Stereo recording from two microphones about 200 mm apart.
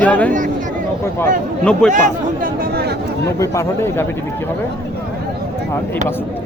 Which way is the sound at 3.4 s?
15° left (ahead or behind).